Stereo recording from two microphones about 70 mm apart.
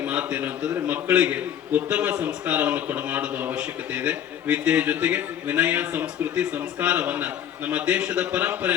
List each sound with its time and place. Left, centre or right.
0.0 s a man's voice: right